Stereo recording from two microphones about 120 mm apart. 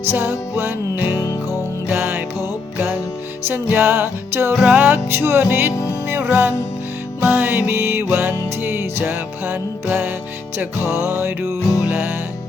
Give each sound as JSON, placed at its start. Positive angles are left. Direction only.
{"t": 0.1, "sound": "music", "side_deg": -20}
{"t": 1.0, "sound": "music", "side_deg": 30}
{"t": 1.9, "sound": "music", "side_deg": -15}
{"t": 4.5, "sound": "music", "side_deg": -10}